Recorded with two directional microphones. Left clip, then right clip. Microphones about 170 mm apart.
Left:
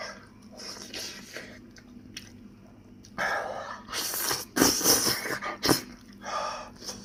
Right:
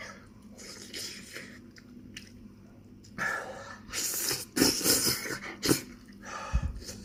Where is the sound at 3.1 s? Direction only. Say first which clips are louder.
Left 4 dB; 20° right (ahead or behind).